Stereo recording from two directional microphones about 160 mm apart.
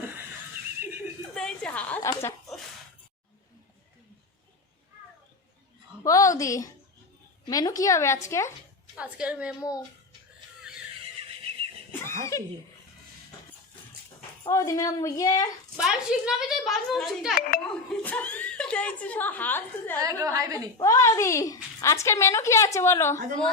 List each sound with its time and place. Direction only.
1.4 s a sound: 5° left (ahead or behind)
2.0 s a woman's voice: 20° left (ahead or behind)
6.0 s a sound: 20° left (ahead or behind)
7.4 s a woman's voice: 25° left (ahead or behind)
9.0 s a woman's voice: 10° right (ahead or behind)
9.6 s a woman's voice: 20° left (ahead or behind)
11.9 s a sound: 15° left (ahead or behind)
14.4 s a woman's voice: 20° left (ahead or behind)
15.8 s a woman's voice: 5° right (ahead or behind); by 20.0 s 10° left (ahead or behind)
20.0 s a woman's voice: 20° right (ahead or behind)
20.7 s a woman's voice: 20° left (ahead or behind)